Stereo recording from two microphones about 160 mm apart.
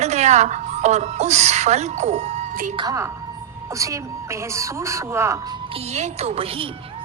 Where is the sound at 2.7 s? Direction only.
20° right (ahead or behind).